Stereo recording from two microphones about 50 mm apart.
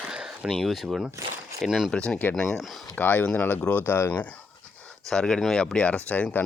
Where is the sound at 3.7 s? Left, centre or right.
Left.